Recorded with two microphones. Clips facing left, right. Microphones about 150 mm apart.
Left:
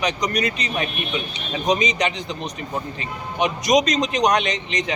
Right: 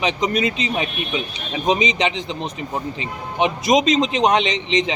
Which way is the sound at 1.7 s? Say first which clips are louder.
Right 2 dB; 25° right (ahead or behind).